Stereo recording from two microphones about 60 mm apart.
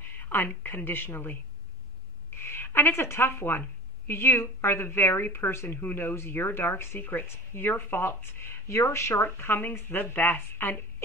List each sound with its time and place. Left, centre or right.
0.2 s a woman's voice: left
8.6 s speech: left